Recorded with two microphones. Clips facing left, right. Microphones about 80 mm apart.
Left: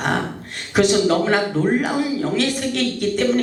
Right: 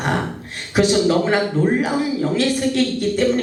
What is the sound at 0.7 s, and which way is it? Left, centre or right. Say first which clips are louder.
Speech: even; left.